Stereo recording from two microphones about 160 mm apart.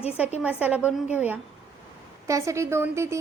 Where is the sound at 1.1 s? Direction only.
10° right (ahead or behind).